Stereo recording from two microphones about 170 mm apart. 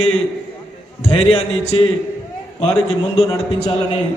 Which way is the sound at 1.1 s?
35° left (ahead or behind).